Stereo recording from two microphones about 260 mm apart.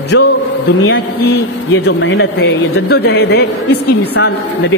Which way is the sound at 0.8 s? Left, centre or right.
Left.